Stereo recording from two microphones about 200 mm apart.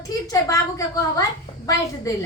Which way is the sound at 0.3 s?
15° left (ahead or behind).